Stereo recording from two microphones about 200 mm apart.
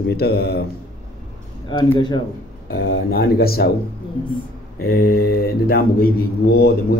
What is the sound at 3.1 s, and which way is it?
Speech, 50° left (ahead or behind).